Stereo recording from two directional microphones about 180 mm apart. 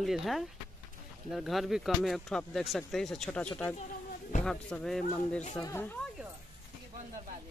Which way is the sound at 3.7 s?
40° left (ahead or behind).